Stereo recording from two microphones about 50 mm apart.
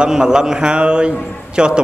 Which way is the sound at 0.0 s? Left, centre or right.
Centre.